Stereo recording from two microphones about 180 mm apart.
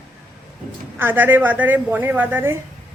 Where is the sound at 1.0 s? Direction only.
10° right (ahead or behind).